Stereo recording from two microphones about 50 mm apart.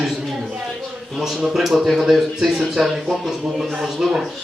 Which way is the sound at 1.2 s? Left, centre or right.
Centre.